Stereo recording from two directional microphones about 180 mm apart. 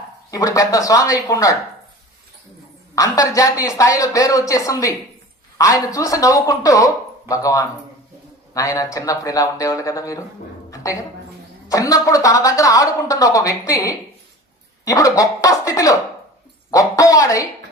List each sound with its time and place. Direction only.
0.3 s speech: 20° left (ahead or behind)
2.9 s speech: 20° left (ahead or behind)
11.7 s speech: 20° left (ahead or behind)